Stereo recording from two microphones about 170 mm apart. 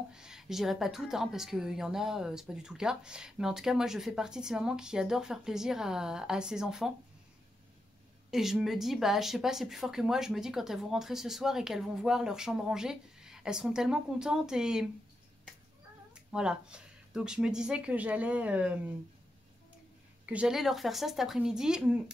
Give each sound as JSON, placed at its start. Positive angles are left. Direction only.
{"t": 0.1, "sound": "a woman's voice", "side_deg": -5}
{"t": 8.3, "sound": "a woman's voice", "side_deg": 0}
{"t": 16.3, "sound": "a woman's voice", "side_deg": -5}
{"t": 20.2, "sound": "a woman's voice", "side_deg": -5}